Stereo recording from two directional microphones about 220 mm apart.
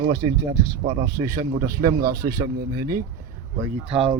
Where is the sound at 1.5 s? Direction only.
40° right (ahead or behind).